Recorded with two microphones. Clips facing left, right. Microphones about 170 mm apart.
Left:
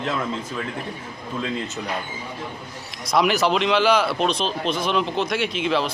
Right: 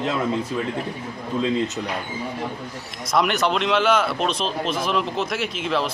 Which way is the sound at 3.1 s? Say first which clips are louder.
Left 1 dB; centre (ahead or behind).